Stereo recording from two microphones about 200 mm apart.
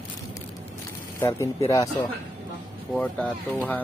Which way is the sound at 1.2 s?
15° left (ahead or behind).